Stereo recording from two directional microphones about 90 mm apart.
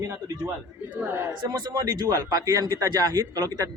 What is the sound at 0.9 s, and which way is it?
Speech, 20° right (ahead or behind).